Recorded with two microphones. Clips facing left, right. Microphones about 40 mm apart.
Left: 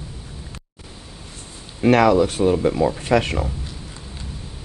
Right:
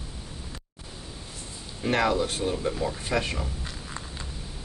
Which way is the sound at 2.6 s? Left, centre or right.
Left.